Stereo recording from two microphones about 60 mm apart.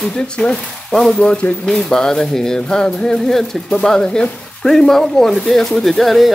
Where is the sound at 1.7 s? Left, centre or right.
Centre.